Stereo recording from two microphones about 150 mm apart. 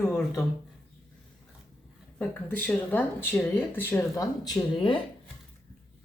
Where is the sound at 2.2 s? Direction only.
10° left (ahead or behind); by 5.0 s 35° left (ahead or behind).